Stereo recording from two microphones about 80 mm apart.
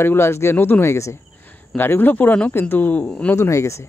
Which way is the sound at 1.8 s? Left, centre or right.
Left.